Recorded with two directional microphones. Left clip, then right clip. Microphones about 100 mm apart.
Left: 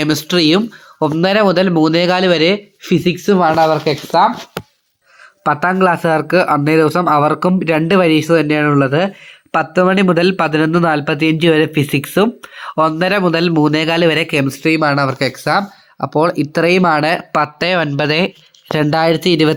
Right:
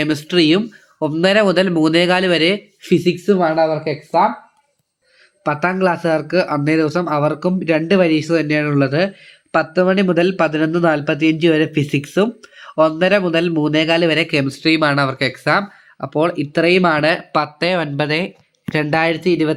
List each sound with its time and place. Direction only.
0.0 s speech: 25° left (ahead or behind)
1.2 s speech: 15° left (ahead or behind)
2.8 s speech: 25° left (ahead or behind)
5.4 s speech: 35° left (ahead or behind)
14.6 s speech: 15° left (ahead or behind)
16.1 s speech: 40° left (ahead or behind)
18.7 s speech: 85° left